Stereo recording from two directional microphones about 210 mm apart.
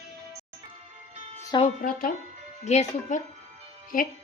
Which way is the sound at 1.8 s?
40° left (ahead or behind).